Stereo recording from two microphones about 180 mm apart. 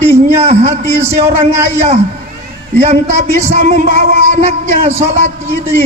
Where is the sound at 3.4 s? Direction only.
35° right (ahead or behind).